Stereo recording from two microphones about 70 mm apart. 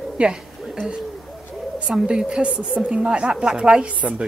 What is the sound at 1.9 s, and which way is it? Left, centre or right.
A woman's voice, centre.